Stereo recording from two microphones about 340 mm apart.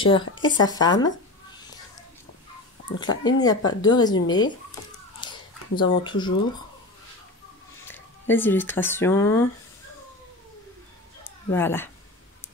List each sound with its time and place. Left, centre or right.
0.0 s speech: centre
3.0 s speech: centre
5.2 s a sound: centre
5.8 s speech: centre
7.9 s speech: centre
11.2 s speech: centre